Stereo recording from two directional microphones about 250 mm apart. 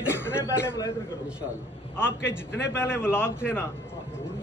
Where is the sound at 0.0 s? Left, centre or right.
Centre.